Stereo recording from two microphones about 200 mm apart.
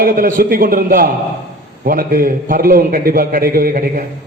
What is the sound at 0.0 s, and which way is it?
A man's voice, 45° right (ahead or behind).